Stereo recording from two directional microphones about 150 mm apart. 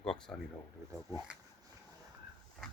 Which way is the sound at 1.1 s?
25° right (ahead or behind).